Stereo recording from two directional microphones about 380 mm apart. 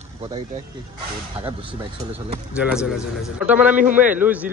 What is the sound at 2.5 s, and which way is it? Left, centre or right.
Speech, centre.